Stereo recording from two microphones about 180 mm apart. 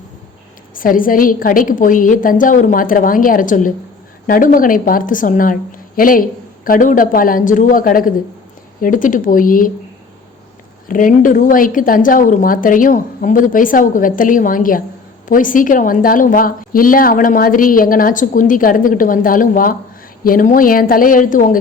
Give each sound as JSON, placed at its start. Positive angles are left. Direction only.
{"t": 0.7, "sound": "a woman's voice", "side_deg": 50}
{"t": 10.8, "sound": "a woman's voice", "side_deg": 50}